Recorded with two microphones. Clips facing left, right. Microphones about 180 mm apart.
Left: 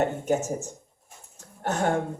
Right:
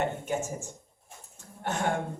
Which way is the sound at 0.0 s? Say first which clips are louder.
Left 5 dB; 40° left (ahead or behind).